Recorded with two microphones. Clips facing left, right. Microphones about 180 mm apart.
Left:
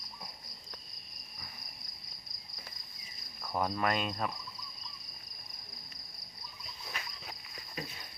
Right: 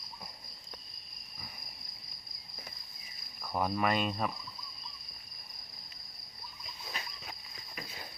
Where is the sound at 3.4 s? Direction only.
10° right (ahead or behind).